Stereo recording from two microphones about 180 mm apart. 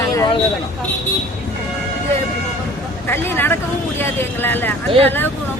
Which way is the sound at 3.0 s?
10° left (ahead or behind).